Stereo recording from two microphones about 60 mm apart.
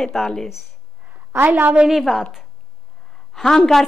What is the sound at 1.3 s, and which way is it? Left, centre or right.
Speech, right.